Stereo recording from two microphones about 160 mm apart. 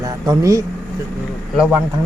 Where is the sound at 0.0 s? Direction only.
20° right (ahead or behind).